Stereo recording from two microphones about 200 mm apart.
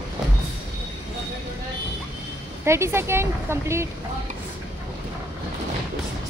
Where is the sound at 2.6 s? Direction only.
15° right (ahead or behind).